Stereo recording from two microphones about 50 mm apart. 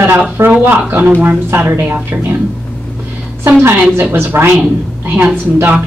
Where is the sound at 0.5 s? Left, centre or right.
Right.